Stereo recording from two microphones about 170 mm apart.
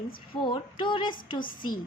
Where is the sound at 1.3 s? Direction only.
55° left (ahead or behind).